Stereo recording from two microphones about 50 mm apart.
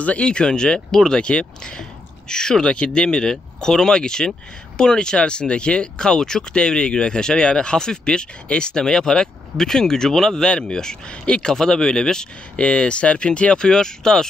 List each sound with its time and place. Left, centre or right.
0.0 s speech: left